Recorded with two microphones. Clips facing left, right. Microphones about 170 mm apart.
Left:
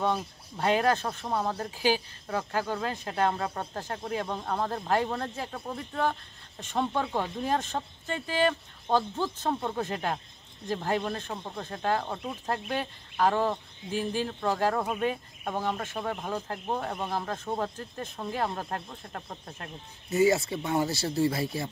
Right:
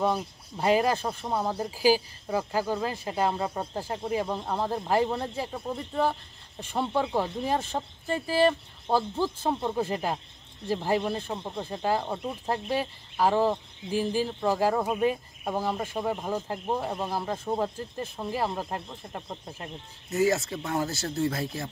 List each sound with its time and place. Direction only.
0.0 s speech: 5° right (ahead or behind)
8.1 s speech: 35° right (ahead or behind)
8.5 s speech: 10° right (ahead or behind)
20.1 s speech: centre (ahead or behind)